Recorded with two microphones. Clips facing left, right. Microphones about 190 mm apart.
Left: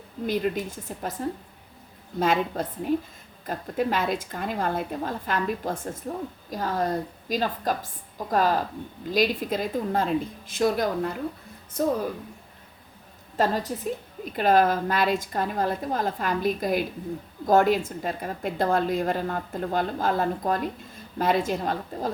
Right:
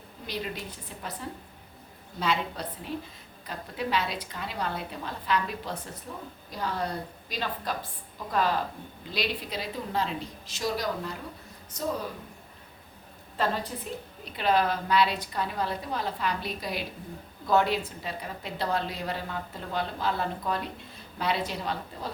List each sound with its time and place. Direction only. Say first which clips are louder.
0.3 s a woman's voice: left 9 dB; 50° left (ahead or behind)
2.1 s a woman's voice: left 6 dB; 45° left (ahead or behind)
13.3 s a woman's voice: left 5 dB; 40° left (ahead or behind)